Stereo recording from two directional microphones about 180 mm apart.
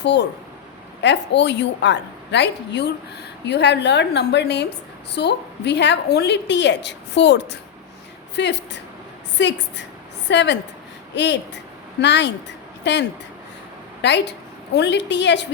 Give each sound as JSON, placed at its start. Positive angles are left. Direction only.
{"t": 0.0, "sound": "a woman's voice", "side_deg": 75}